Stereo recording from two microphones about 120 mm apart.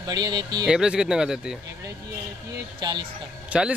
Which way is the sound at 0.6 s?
5° right (ahead or behind).